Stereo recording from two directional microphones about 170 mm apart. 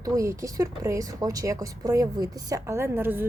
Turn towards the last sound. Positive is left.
turn(degrees=-10)  # may be behind; listen again after turning